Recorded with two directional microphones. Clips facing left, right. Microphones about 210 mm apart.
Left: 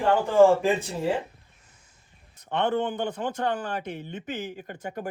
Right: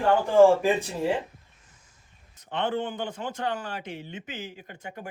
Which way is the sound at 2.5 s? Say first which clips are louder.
Left 3 dB; 60° left (ahead or behind).